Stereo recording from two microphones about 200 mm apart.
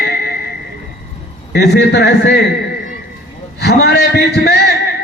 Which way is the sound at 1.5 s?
55° left (ahead or behind).